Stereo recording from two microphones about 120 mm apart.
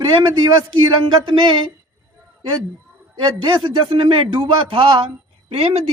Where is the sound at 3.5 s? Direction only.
45° right (ahead or behind).